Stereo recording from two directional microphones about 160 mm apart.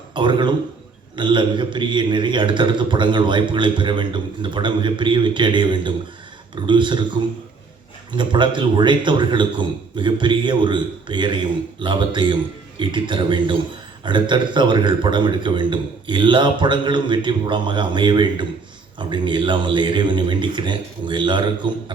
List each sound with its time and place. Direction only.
0.1 s a man's voice: 30° right (ahead or behind)
8.1 s a man's voice: 30° right (ahead or behind)